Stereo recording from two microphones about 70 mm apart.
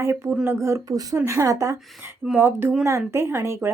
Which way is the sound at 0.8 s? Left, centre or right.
Right.